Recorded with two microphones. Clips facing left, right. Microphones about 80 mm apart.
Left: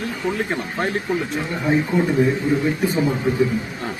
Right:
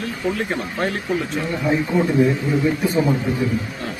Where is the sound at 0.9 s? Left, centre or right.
Centre.